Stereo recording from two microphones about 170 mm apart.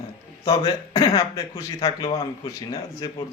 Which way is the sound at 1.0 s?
20° left (ahead or behind).